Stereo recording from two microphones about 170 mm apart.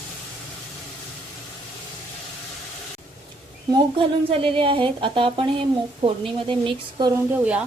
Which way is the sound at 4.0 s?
30° right (ahead or behind).